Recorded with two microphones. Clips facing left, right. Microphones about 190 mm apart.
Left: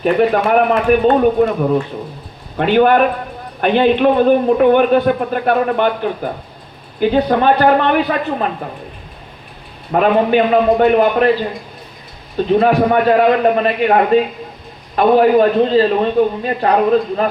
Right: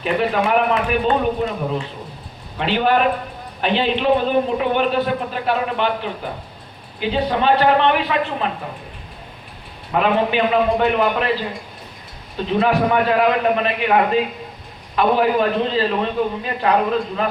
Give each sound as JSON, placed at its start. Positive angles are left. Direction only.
{"t": 0.0, "sound": "speech", "side_deg": 45}
{"t": 9.9, "sound": "a man's voice", "side_deg": 40}
{"t": 12.5, "sound": "a man's voice", "side_deg": 40}